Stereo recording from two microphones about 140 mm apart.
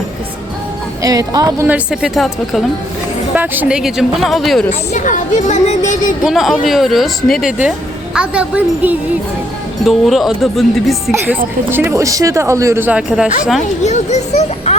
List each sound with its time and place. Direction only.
1.0 s speech: 25° right (ahead or behind)
1.6 s speech: 10° right (ahead or behind)
3.3 s speech: 15° right (ahead or behind)
4.9 s speech: 65° left (ahead or behind)
6.2 s a woman's voice: centre (ahead or behind)
9.8 s speech: centre (ahead or behind)
11.7 s speech: 15° right (ahead or behind)
13.0 s speech: 5° right (ahead or behind)
13.8 s a child's voice: 55° left (ahead or behind)